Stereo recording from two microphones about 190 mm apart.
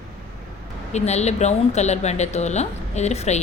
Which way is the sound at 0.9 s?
35° left (ahead or behind).